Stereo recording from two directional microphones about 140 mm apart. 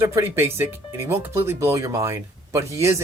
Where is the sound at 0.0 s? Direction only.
20° right (ahead or behind).